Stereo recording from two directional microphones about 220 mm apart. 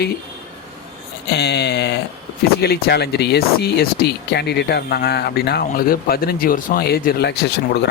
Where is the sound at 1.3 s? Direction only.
50° left (ahead or behind).